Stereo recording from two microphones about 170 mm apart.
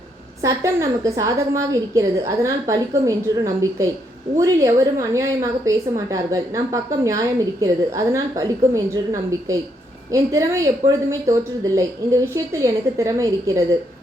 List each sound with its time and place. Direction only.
0.4 s a woman's voice: 20° right (ahead or behind)